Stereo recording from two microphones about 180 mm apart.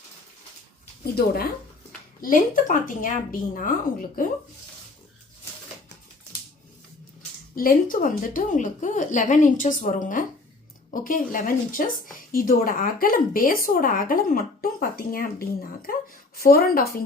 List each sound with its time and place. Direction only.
1.1 s a woman's voice: 60° left (ahead or behind)
7.5 s a woman's voice: 50° left (ahead or behind)